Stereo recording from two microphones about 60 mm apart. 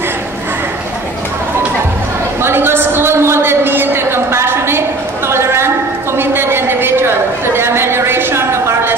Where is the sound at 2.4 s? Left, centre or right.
Right.